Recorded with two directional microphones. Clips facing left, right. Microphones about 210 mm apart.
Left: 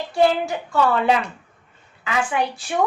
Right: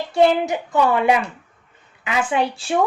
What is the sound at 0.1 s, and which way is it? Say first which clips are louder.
A woman's voice: right 2 dB; 20° right (ahead or behind).